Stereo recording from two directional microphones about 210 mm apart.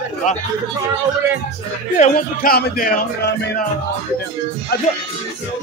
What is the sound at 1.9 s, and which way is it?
Speech, 40° left (ahead or behind).